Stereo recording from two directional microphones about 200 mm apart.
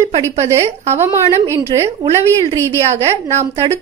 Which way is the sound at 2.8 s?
30° right (ahead or behind).